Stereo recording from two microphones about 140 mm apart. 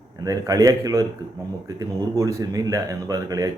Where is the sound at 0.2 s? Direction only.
25° right (ahead or behind).